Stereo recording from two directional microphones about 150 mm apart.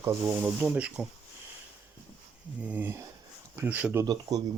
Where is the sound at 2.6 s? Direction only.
10° right (ahead or behind).